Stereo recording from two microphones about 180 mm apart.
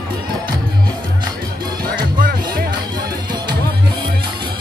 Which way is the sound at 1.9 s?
55° right (ahead or behind).